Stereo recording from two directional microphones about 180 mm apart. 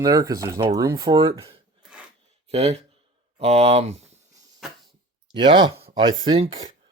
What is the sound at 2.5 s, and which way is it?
Speech, 35° right (ahead or behind).